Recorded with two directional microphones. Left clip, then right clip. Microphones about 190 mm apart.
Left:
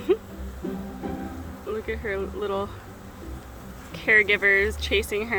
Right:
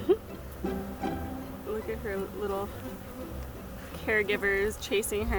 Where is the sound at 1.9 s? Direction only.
20° left (ahead or behind).